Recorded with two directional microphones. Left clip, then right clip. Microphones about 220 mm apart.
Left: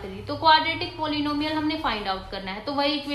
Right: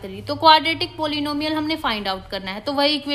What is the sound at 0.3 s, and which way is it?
A woman's voice, 55° right (ahead or behind).